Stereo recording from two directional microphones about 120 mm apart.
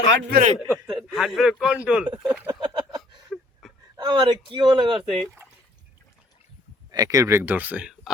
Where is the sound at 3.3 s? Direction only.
Centre (ahead or behind).